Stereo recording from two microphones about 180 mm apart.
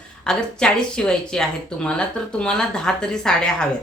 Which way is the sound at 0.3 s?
5° left (ahead or behind).